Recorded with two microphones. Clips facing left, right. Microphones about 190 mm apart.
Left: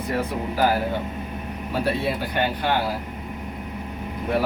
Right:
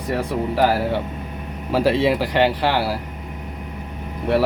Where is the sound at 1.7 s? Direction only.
90° right.